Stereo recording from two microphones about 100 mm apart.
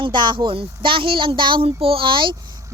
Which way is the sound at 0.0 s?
50° right (ahead or behind).